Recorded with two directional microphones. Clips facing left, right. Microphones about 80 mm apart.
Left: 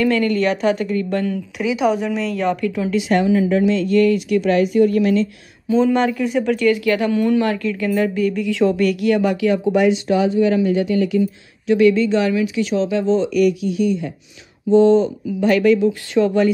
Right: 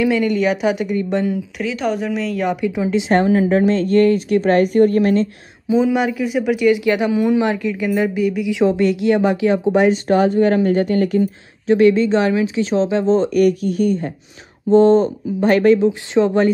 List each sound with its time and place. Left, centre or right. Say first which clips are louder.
0.0 s a woman's voice: right 1 dB; centre
1.6 s a woman's voice: left 4 dB; centre
2.5 s speech: right 1 dB; centre
3.2 s speech: right 2 dB; right
5.7 s speech: even; centre; by 9.9 s right
10.0 s speech: right 2 dB; right